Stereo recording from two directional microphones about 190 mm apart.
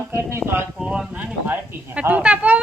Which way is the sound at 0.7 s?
Centre (ahead or behind).